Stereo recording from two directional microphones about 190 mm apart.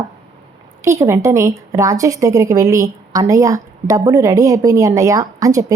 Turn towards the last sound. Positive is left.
turn(degrees=-15)  # may be behind; listen again after turning